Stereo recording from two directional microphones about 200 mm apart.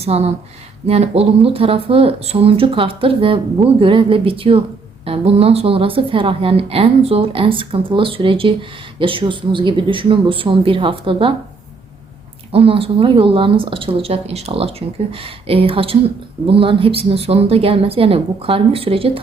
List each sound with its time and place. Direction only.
0.0 s speech: 30° right (ahead or behind)
12.5 s speech: 30° right (ahead or behind)